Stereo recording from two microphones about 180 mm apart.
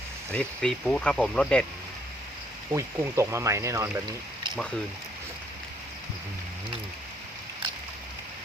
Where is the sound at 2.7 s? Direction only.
15° right (ahead or behind).